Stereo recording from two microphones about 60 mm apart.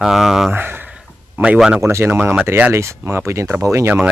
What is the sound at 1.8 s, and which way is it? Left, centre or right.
Speech, right.